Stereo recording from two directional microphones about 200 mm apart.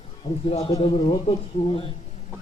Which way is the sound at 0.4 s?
25° left (ahead or behind).